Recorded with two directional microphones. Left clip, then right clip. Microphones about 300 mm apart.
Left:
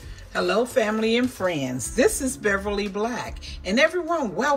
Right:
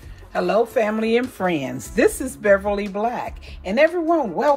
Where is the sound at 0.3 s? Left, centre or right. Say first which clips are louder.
Right 3 dB; centre.